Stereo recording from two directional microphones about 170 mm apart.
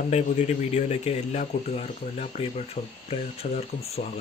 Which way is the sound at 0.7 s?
40° left (ahead or behind).